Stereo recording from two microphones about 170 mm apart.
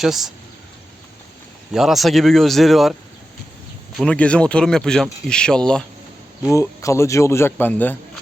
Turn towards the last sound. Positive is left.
turn(degrees=10)  # may be behind; listen again after turning